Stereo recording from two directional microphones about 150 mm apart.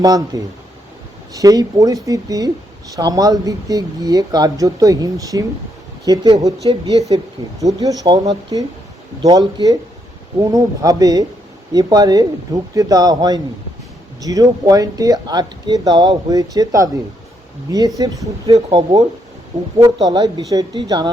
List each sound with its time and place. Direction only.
0.3 s speech: 25° right (ahead or behind)
7.6 s speech: 25° right (ahead or behind)